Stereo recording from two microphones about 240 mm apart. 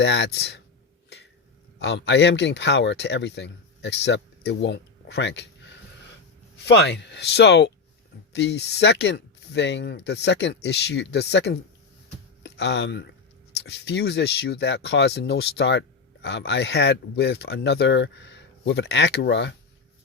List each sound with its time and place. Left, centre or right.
0.0 s speech: left
1.8 s speech: left